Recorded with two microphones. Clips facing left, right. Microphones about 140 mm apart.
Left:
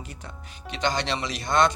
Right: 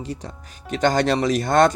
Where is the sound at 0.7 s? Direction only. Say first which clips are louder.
Right 8 dB; 45° right (ahead or behind).